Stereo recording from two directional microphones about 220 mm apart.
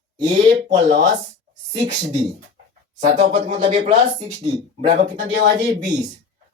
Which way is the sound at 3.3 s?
30° right (ahead or behind).